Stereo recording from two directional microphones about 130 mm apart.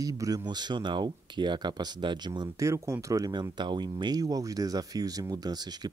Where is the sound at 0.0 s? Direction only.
25° right (ahead or behind).